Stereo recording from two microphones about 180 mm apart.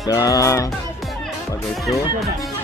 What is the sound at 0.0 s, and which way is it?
Music, 20° left (ahead or behind).